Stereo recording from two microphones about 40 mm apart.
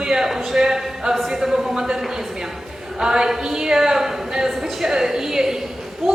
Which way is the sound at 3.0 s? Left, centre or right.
Centre.